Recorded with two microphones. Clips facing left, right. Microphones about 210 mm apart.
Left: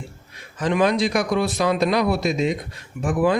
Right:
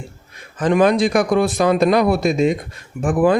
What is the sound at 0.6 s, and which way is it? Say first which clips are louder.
Speech: right 5 dB; 50° right (ahead or behind).